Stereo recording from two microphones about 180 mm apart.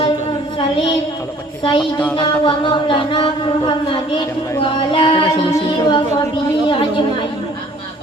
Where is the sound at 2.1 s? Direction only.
25° left (ahead or behind).